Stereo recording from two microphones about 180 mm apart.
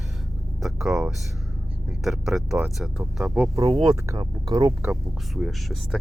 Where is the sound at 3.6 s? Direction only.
30° right (ahead or behind).